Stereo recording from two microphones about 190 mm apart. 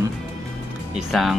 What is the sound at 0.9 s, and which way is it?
Speech, centre (ahead or behind).